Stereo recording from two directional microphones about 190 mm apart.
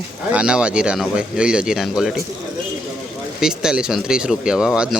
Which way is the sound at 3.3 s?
5° right (ahead or behind).